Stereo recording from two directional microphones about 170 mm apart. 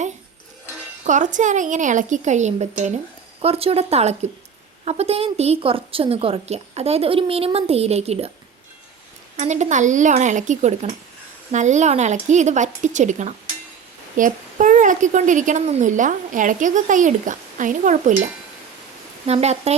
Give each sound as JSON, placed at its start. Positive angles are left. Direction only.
{"t": 1.0, "sound": "a child's voice", "side_deg": -45}
{"t": 9.4, "sound": "a child's voice", "side_deg": -45}